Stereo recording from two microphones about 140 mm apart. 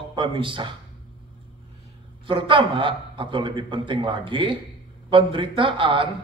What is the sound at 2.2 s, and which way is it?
A man's voice, 35° right (ahead or behind).